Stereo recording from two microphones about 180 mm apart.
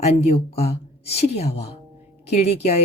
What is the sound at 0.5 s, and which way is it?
A woman's voice, 35° left (ahead or behind).